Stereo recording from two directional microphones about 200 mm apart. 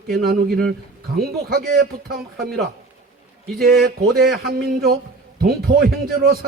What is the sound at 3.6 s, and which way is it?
A man's voice, 50° right (ahead or behind).